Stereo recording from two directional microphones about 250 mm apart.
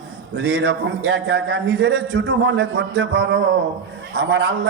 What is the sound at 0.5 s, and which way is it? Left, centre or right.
Speech, right.